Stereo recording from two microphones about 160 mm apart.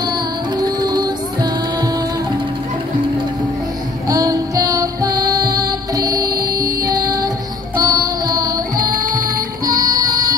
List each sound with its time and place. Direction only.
0.6 s music: 25° right (ahead or behind)
4.1 s music: 20° right (ahead or behind)